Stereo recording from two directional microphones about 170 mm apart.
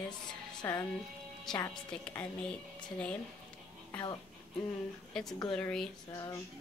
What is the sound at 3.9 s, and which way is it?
Speech, 20° left (ahead or behind).